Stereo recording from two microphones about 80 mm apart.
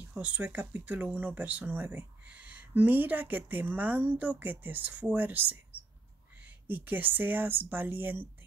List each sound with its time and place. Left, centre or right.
0.1 s speech: centre